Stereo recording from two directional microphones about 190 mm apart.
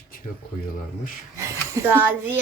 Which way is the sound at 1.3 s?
15° right (ahead or behind).